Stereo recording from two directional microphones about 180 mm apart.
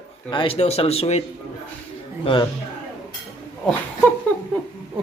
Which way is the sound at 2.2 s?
30° left (ahead or behind).